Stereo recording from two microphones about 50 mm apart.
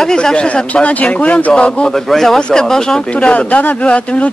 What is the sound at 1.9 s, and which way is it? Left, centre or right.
Speech, centre.